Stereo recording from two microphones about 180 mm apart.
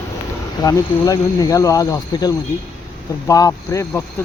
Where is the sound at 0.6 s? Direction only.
20° left (ahead or behind).